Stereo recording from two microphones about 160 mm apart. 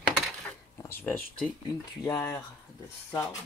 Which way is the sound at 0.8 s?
15° left (ahead or behind).